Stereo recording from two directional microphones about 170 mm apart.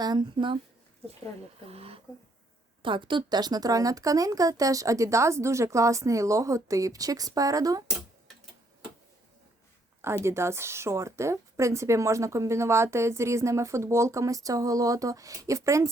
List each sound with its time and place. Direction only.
0.0 s speech: 25° right (ahead or behind)
1.6 s speech: 35° right (ahead or behind)
10.2 s speech: 15° right (ahead or behind)